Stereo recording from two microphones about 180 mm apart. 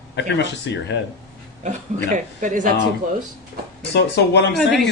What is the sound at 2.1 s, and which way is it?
Speech, 45° right (ahead or behind).